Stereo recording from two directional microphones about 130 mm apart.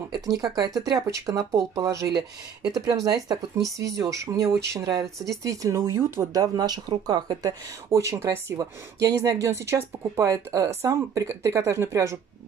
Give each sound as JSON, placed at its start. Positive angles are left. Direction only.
{"t": 0.1, "sound": "speech", "side_deg": -30}
{"t": 7.9, "sound": "speech", "side_deg": -20}